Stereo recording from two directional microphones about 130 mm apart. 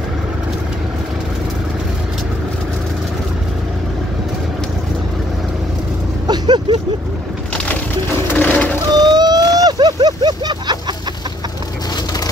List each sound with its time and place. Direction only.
6.2 s vehicle: 35° right (ahead or behind)
8.3 s a sound: 10° left (ahead or behind)
8.9 s vehicle: 30° right (ahead or behind)